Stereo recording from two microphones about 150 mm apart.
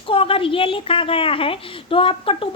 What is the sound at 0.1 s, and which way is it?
A woman's voice, 35° left (ahead or behind).